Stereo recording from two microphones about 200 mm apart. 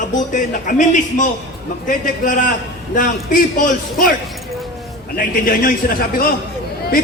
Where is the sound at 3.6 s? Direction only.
40° left (ahead or behind).